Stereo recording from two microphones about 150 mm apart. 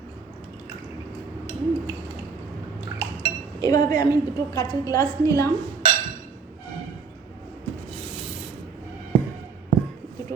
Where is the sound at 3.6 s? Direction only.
25° left (ahead or behind).